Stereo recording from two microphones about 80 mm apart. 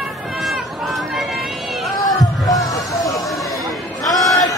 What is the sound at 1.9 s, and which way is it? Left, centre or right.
Heart sounds, left.